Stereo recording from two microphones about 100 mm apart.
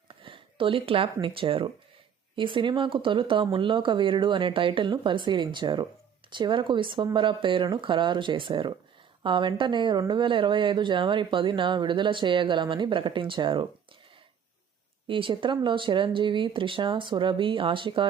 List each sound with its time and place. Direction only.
0.1 s a woman's voice: 60° right (ahead or behind)
15.0 s speech: 60° right (ahead or behind)